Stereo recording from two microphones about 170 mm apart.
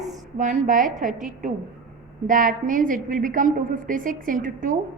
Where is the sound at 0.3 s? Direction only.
50° right (ahead or behind).